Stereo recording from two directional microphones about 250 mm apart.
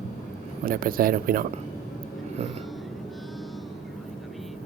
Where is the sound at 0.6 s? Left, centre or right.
Right.